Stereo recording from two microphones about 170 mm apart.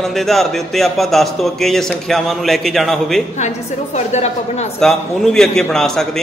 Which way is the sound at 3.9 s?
40° left (ahead or behind).